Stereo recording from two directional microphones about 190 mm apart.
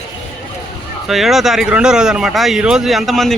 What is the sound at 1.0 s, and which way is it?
Speech, centre (ahead or behind).